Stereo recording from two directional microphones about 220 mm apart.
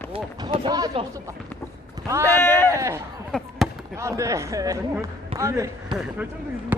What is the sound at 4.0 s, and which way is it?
Speech, 15° right (ahead or behind).